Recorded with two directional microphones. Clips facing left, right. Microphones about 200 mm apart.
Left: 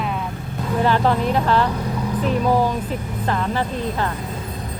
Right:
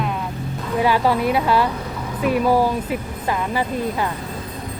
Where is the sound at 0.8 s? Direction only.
10° right (ahead or behind).